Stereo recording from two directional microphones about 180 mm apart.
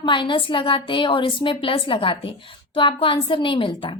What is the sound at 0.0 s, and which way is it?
A woman's voice, 25° left (ahead or behind).